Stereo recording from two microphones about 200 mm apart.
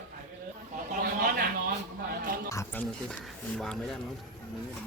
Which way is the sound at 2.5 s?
15° left (ahead or behind).